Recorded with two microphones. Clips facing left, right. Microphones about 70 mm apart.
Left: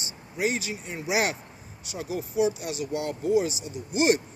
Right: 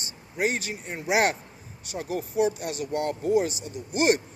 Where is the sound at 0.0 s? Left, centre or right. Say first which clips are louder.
Right 1 dB; right.